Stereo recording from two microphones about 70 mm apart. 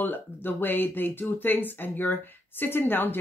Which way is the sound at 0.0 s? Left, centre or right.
Left.